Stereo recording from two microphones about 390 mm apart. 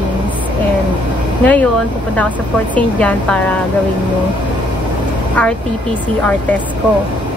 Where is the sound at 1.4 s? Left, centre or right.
Centre.